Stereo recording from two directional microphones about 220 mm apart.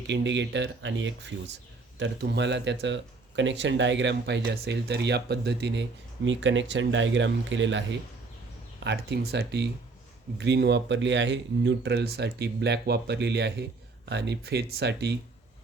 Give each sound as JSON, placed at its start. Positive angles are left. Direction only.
{"t": 0.1, "sound": "speech", "side_deg": -55}